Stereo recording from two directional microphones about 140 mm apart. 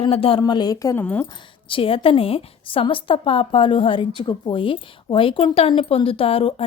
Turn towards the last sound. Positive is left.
turn(degrees=40)  # may be behind; listen again after turning